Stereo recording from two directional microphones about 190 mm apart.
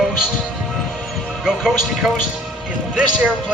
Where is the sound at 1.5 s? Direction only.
5° right (ahead or behind).